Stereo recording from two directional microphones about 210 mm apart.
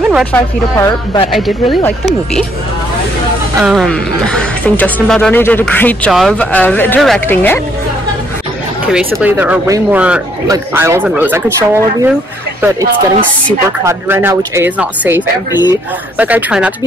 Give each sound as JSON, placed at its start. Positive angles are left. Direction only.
{"t": 0.1, "sound": "speech", "side_deg": 0}
{"t": 0.7, "sound": "speech", "side_deg": 15}
{"t": 3.6, "sound": "speech", "side_deg": 0}
{"t": 8.9, "sound": "speech", "side_deg": -5}
{"t": 13.8, "sound": "speech", "side_deg": -10}
{"t": 15.5, "sound": "speech", "side_deg": 20}
{"t": 16.2, "sound": "speech", "side_deg": -5}